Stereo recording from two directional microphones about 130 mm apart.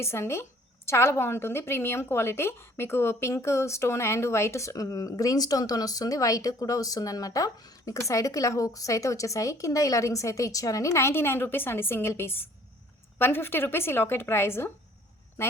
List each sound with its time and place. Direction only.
0.0 s a woman's voice: 20° left (ahead or behind)